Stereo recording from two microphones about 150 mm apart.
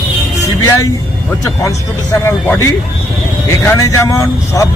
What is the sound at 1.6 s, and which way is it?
Speech, 15° left (ahead or behind).